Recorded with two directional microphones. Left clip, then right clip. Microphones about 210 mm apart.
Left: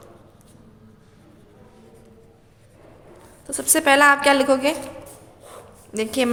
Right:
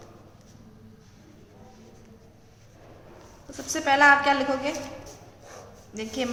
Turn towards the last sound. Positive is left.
turn(degrees=55)  # may be behind; listen again after turning